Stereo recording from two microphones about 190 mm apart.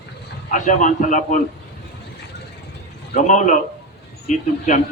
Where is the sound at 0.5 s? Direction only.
40° left (ahead or behind).